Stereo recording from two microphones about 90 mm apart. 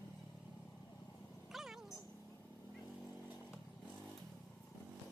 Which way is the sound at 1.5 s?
5° right (ahead or behind).